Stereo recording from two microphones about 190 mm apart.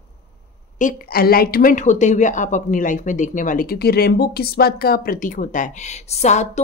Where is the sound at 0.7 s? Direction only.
45° left (ahead or behind).